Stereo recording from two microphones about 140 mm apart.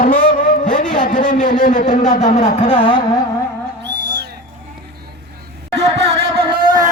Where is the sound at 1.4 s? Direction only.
35° left (ahead or behind).